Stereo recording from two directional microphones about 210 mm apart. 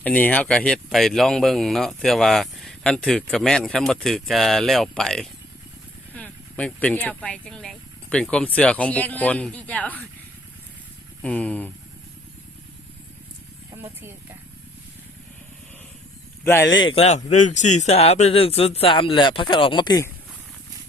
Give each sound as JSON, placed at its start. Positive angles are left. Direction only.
{"t": 0.0, "sound": "speech", "side_deg": 5}
{"t": 11.2, "sound": "speech", "side_deg": 5}
{"t": 16.4, "sound": "speech", "side_deg": 10}
{"t": 16.7, "sound": "speech", "side_deg": 25}